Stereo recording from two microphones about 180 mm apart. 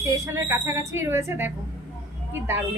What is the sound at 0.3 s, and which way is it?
A woman's voice, 15° right (ahead or behind).